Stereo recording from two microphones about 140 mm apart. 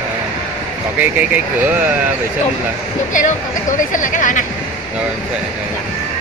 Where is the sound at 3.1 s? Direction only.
65° left (ahead or behind).